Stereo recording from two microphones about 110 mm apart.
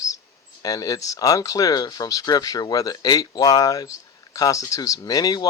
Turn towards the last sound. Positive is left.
turn(degrees=35)  # may be behind; listen again after turning